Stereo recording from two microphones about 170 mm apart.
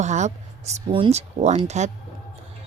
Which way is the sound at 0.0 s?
45° right (ahead or behind).